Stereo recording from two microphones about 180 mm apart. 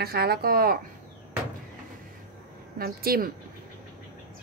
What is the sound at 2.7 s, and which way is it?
Speech, 55° right (ahead or behind).